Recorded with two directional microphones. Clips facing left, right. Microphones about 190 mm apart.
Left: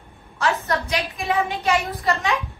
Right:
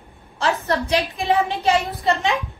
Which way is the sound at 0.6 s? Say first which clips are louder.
Right 4 dB; 30° right (ahead or behind).